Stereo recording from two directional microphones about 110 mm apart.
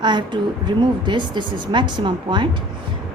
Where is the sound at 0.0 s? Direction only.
45° right (ahead or behind).